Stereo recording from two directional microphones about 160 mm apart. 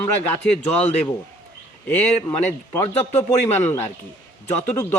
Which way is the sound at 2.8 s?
45° left (ahead or behind).